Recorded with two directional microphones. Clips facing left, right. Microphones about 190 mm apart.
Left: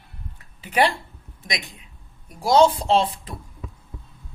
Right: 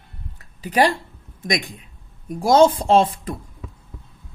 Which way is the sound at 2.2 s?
50° right (ahead or behind).